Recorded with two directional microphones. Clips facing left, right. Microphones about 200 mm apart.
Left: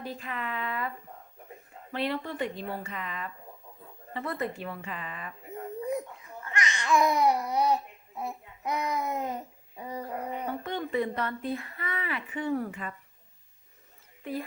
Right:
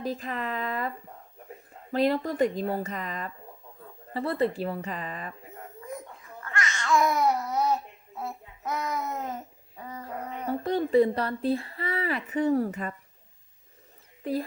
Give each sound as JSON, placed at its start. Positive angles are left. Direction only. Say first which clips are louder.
{"t": 0.0, "sound": "speech", "louder": "right 5 dB", "side_deg": -40}
{"t": 6.4, "sound": "babbling", "louder": "right 1 dB", "side_deg": 15}
{"t": 10.6, "sound": "speech", "louder": "right 11 dB", "side_deg": -35}
{"t": 14.2, "sound": "speech", "louder": "right 5 dB", "side_deg": -35}